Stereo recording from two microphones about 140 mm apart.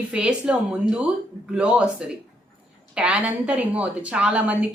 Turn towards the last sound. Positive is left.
turn(degrees=-10)  # may be behind; listen again after turning